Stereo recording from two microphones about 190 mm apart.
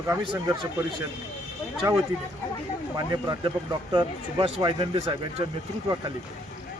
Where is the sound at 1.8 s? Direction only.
20° right (ahead or behind).